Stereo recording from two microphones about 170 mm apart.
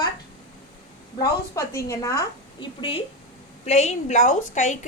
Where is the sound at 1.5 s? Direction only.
20° left (ahead or behind).